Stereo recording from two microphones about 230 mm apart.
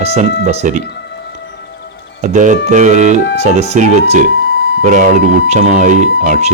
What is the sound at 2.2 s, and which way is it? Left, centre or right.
Speech, right.